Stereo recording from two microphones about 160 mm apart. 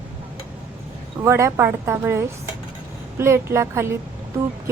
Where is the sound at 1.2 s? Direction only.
15° right (ahead or behind).